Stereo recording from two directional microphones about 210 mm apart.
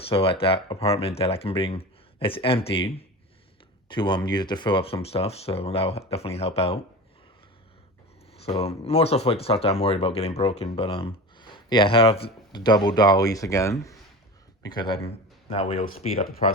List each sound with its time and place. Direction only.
0.1 s speech: 25° left (ahead or behind)
8.4 s speech: 30° left (ahead or behind)
16.1 s speech: 40° left (ahead or behind)